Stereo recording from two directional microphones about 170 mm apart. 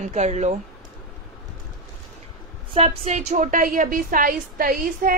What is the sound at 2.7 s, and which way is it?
Female singing, 40° right (ahead or behind).